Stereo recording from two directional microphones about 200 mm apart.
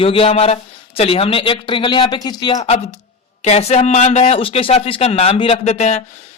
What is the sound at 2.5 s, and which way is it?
Speech, 35° left (ahead or behind).